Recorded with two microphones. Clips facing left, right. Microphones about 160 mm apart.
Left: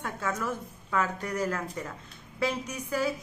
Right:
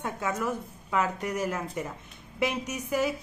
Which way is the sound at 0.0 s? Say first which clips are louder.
Right 2 dB; 15° right (ahead or behind).